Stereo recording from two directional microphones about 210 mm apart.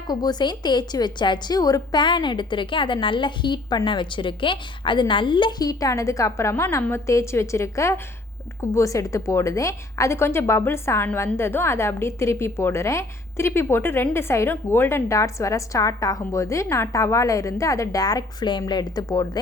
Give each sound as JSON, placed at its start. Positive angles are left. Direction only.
{"t": 0.1, "sound": "a woman's voice", "side_deg": 20}